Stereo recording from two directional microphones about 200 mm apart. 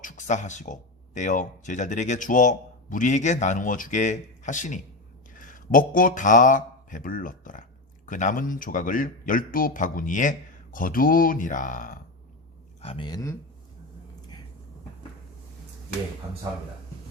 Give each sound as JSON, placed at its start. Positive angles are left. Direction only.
{"t": 0.0, "sound": "speech", "side_deg": 35}
{"t": 12.8, "sound": "speech", "side_deg": 25}